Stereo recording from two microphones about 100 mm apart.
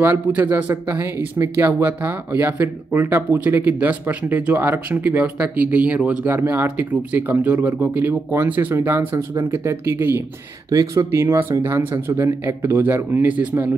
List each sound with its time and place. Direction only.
0.0 s a man's voice: 20° right (ahead or behind)
10.7 s speech: 35° right (ahead or behind); by 13.7 s 15° right (ahead or behind)